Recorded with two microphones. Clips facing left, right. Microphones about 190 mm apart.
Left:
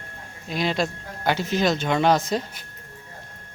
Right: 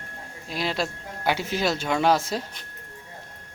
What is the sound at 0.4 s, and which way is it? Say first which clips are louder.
Speech: left 3 dB; centre (ahead or behind).